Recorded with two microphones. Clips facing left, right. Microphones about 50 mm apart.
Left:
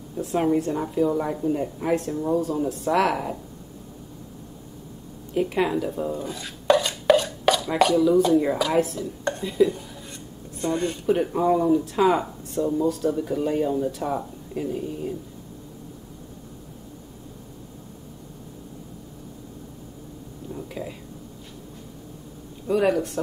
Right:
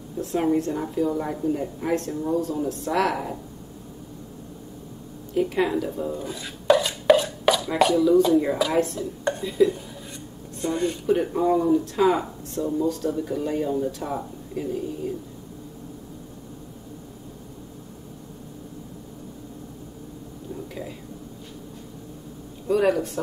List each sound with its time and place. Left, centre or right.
0.2 s speech: centre
5.3 s chopping: centre
9.2 s speech: centre
20.5 s whispering: centre
22.7 s speech: centre